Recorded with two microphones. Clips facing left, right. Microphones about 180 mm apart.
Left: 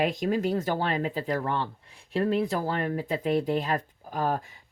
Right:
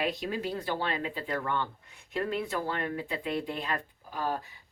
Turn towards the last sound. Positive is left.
turn(degrees=50)  # may be behind; listen again after turning